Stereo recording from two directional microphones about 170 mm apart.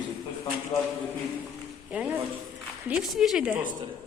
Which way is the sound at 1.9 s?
5° right (ahead or behind).